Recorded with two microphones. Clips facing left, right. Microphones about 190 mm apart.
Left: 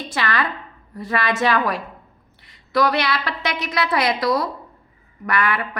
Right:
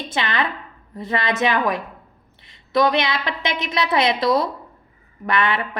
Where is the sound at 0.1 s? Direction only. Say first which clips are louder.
Even; 20° right (ahead or behind).